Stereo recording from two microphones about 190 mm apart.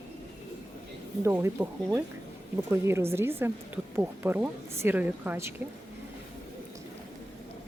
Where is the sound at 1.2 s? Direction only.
15° right (ahead or behind).